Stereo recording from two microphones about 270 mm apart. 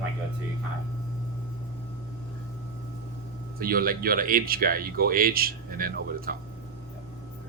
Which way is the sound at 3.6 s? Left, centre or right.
Right.